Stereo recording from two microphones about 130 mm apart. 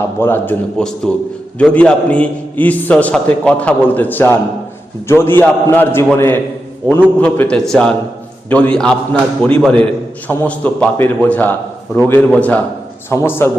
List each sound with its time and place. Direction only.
0.2 s a man's voice: 15° left (ahead or behind)
0.8 s a man's voice: 5° left (ahead or behind)